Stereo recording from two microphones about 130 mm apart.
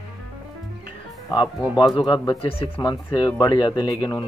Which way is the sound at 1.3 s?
35° left (ahead or behind).